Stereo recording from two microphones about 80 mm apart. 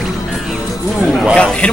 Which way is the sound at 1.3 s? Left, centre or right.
Centre.